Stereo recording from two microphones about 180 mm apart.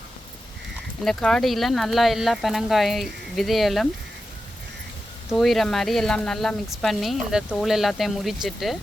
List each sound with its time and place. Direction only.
1.0 s speech: centre (ahead or behind)
5.3 s speech: centre (ahead or behind)